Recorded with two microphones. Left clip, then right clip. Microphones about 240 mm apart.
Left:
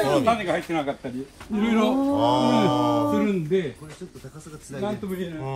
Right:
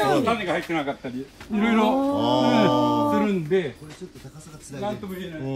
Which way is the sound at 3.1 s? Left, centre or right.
Right.